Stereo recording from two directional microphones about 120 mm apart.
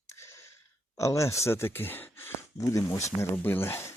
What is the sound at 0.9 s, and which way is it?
Speech, 25° left (ahead or behind).